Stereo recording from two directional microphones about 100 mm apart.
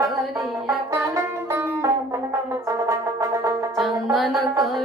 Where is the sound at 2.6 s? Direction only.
35° right (ahead or behind).